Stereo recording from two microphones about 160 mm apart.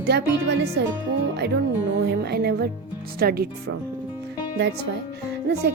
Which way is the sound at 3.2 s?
75° right (ahead or behind).